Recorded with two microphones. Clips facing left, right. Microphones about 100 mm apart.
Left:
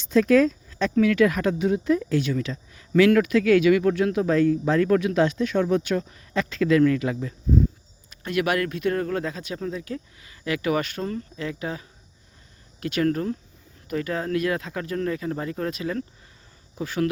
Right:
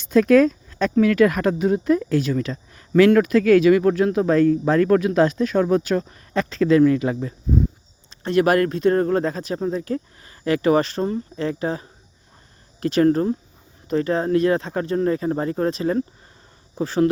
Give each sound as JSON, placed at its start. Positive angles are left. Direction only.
{"t": 0.0, "sound": "speech", "side_deg": -50}